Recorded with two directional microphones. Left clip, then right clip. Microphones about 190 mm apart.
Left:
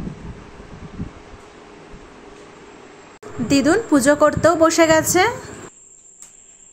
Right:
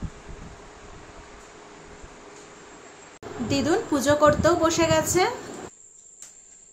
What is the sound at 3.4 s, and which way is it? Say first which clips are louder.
A woman's voice: left 7 dB; 40° left (ahead or behind).